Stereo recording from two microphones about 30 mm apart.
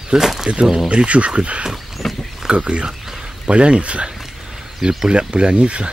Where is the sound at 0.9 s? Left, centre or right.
Right.